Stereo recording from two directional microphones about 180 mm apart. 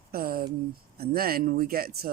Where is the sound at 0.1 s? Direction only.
55° right (ahead or behind).